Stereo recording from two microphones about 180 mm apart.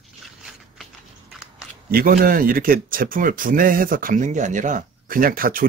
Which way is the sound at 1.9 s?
55° right (ahead or behind).